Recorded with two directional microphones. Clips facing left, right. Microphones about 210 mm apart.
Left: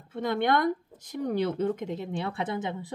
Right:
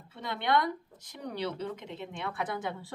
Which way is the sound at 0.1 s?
45° left (ahead or behind).